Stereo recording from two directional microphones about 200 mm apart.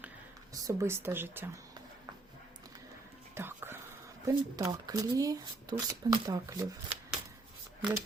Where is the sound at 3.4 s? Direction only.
10° right (ahead or behind).